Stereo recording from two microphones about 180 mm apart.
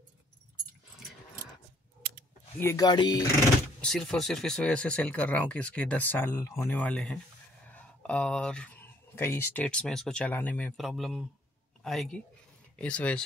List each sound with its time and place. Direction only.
2.6 s speech: 20° left (ahead or behind)
3.8 s speech: 5° left (ahead or behind)
10.8 s speech: centre (ahead or behind)